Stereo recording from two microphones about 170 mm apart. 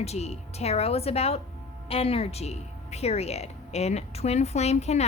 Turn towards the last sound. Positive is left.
turn(degrees=40)  # may be behind; listen again after turning